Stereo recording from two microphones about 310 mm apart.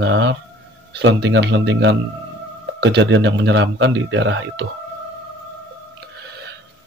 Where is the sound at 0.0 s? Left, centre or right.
Right.